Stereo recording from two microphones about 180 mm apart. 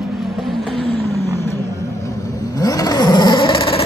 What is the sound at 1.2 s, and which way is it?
Vehicle, 15° left (ahead or behind).